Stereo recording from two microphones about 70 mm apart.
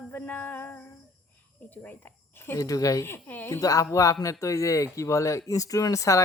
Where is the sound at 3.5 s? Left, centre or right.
Left.